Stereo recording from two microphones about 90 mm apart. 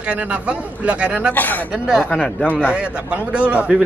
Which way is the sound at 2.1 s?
10° left (ahead or behind).